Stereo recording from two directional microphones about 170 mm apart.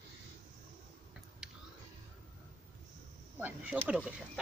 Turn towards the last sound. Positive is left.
turn(degrees=-5)  # may be behind; listen again after turning